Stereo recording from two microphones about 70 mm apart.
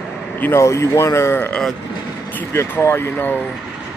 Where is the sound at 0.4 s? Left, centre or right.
Left.